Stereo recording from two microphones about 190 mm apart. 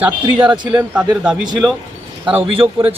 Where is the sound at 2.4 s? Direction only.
30° right (ahead or behind).